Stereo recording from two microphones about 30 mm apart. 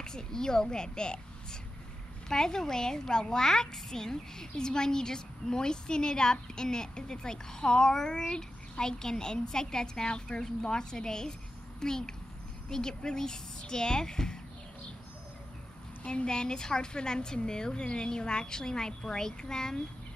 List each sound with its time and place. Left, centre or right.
0.0 s a woman's voice: left
16.0 s a woman's voice: left